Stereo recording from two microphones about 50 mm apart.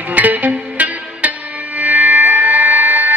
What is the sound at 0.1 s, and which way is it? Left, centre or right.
Music, right.